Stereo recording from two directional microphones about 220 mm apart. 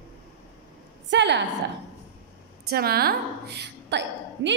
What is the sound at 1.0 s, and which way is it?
Speech, 55° right (ahead or behind).